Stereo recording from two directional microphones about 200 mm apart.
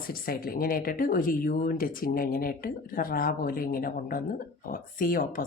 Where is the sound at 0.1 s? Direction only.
45° left (ahead or behind).